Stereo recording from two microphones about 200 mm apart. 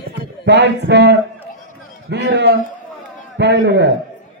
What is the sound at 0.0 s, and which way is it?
A man's voice, 60° right (ahead or behind).